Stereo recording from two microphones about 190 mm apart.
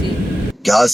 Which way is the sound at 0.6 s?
Centre (ahead or behind).